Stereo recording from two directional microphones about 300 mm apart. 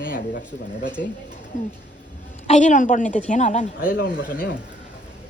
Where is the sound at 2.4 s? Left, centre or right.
Left.